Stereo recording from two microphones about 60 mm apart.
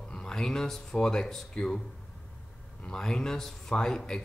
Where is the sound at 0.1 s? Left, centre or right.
Centre.